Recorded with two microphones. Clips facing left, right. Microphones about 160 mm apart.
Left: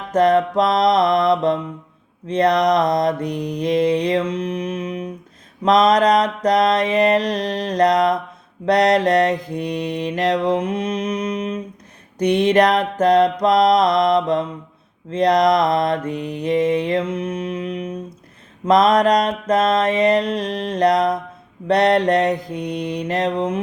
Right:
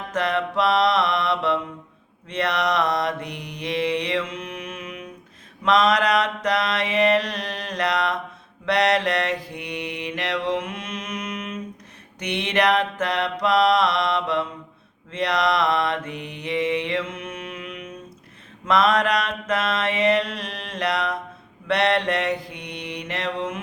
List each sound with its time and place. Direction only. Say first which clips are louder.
0.1 s music: left 9 dB; 40° left (ahead or behind)
2.2 s mantra: left 8 dB; 40° left (ahead or behind)